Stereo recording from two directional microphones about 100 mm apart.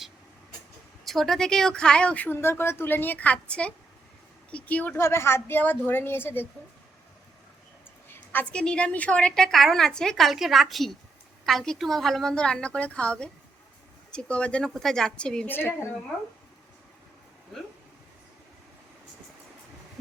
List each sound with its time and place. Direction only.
1.0 s speech: centre (ahead or behind)
4.9 s a woman's voice: 25° left (ahead or behind)
8.1 s a sound: 20° left (ahead or behind)
8.6 s a woman's voice: 10° left (ahead or behind)
15.5 s a woman's voice: 25° left (ahead or behind)
17.5 s a woman's voice: 5° left (ahead or behind)